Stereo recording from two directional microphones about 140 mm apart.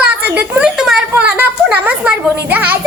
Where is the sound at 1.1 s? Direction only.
15° right (ahead or behind).